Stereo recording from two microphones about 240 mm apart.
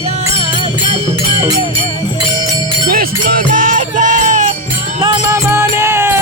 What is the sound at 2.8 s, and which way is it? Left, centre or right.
Music, right.